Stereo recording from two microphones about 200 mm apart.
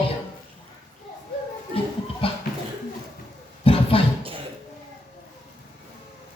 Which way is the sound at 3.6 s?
30° left (ahead or behind).